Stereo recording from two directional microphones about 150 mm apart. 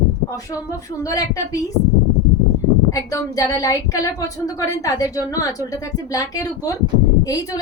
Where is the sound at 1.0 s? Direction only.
25° left (ahead or behind).